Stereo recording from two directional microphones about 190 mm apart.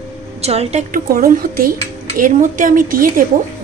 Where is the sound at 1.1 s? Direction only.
50° right (ahead or behind).